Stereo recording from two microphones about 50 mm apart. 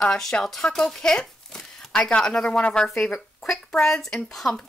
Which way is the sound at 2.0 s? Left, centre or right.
Centre.